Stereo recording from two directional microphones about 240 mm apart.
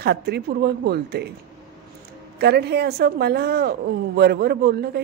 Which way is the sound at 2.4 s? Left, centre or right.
Right.